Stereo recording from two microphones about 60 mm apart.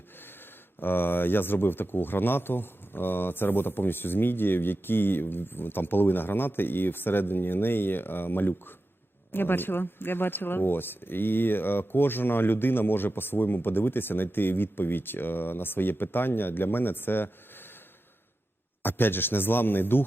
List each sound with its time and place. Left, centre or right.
0.8 s speech: left
18.8 s speech: left